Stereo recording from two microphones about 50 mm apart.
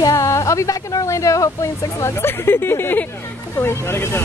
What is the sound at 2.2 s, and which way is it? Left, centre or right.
Speech, left.